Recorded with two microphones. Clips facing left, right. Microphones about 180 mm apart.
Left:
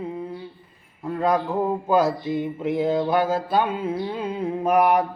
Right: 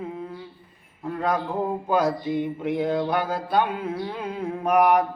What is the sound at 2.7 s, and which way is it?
Mantra, 5° left (ahead or behind).